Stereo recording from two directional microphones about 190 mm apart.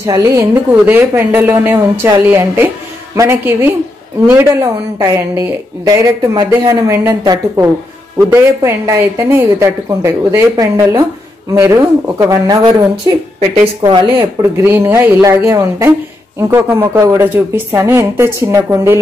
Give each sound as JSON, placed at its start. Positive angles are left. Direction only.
{"t": 0.0, "sound": "a woman's voice", "side_deg": -15}
{"t": 14.1, "sound": "a woman's voice", "side_deg": -10}